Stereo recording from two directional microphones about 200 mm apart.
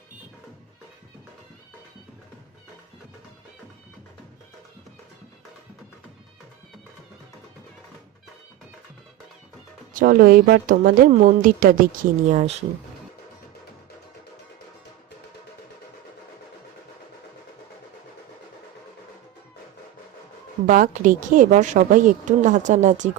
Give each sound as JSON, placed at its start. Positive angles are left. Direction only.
{"t": 9.9, "sound": "a woman's voice", "side_deg": -45}
{"t": 20.7, "sound": "a woman's voice", "side_deg": -40}